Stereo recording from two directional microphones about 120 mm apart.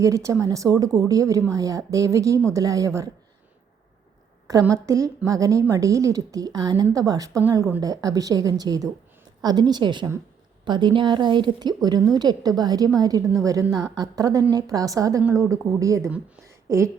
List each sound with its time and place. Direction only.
0.0 s speech: 25° right (ahead or behind)
4.7 s a woman's voice: 30° right (ahead or behind)
16.5 s a sound: 25° right (ahead or behind)